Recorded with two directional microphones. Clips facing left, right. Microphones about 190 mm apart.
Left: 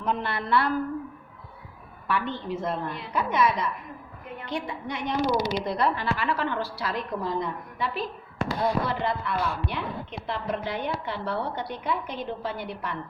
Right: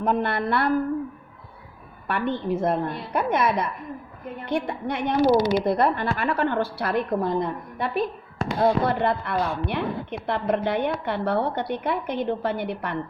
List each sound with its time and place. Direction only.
0.0 s a woman's voice: 50° right (ahead or behind)
2.0 s a woman's voice: 55° right (ahead or behind)